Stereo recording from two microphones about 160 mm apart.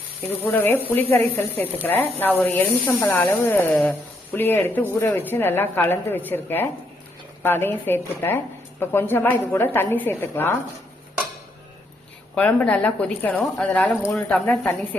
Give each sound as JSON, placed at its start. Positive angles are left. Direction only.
{"t": 0.3, "sound": "a woman's voice", "side_deg": 10}
{"t": 12.3, "sound": "a woman's voice", "side_deg": 10}